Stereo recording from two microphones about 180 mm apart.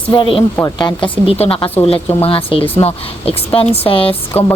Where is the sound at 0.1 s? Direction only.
25° left (ahead or behind).